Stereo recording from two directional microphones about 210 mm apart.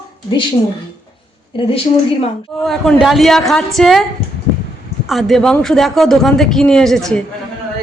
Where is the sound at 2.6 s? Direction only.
Centre (ahead or behind).